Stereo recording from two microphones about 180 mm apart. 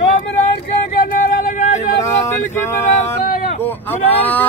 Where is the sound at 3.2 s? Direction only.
40° left (ahead or behind).